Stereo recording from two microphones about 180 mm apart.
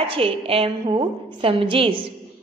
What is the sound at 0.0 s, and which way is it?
A woman's voice, 30° right (ahead or behind).